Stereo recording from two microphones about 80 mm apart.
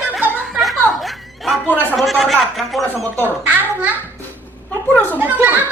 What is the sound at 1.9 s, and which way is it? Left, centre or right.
Speech, centre.